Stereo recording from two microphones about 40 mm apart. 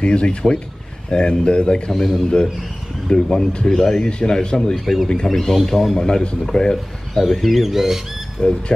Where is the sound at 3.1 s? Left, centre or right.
Left.